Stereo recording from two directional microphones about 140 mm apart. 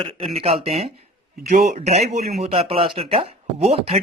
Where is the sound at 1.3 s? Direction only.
60° right (ahead or behind); by 4.0 s 45° right (ahead or behind).